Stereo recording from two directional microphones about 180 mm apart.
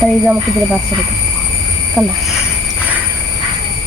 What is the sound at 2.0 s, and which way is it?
Speech, 15° right (ahead or behind).